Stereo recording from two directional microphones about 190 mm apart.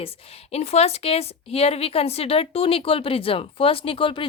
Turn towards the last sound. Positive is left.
turn(degrees=25)  # may be behind; listen again after turning